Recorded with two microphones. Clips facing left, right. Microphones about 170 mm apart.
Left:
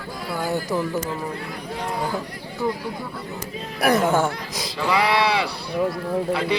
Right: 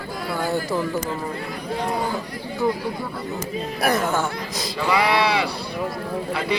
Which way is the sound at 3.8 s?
15° left (ahead or behind).